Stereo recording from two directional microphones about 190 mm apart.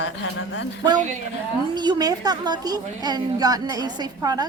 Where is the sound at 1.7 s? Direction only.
20° right (ahead or behind).